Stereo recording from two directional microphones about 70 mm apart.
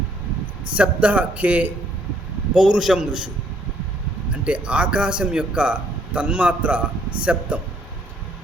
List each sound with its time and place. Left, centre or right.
0.8 s a man's voice: centre
2.6 s a man's voice: centre
4.3 s a man's voice: centre